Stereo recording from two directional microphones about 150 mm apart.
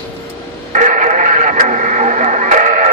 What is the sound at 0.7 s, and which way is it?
Radio, 55° right (ahead or behind).